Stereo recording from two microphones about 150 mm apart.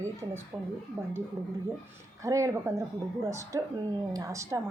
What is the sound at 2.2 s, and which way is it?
A woman's voice, 20° right (ahead or behind).